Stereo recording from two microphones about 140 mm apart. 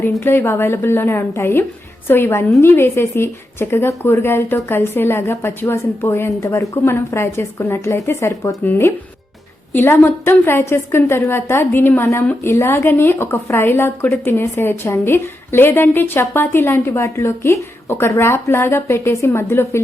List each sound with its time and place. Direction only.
0.0 s a woman's voice: 15° left (ahead or behind)